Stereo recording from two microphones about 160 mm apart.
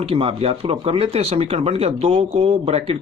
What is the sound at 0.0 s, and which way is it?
Speech, 35° right (ahead or behind).